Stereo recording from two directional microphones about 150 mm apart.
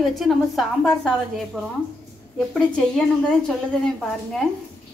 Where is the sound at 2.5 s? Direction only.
5° left (ahead or behind).